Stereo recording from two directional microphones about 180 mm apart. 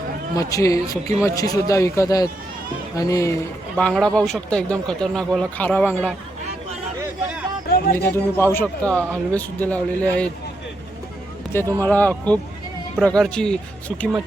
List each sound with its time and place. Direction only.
0.3 s speech: 20° left (ahead or behind)
3.8 s speech: 5° left (ahead or behind)
7.9 s speech: 10° left (ahead or behind)
11.8 s speech: 10° left (ahead or behind)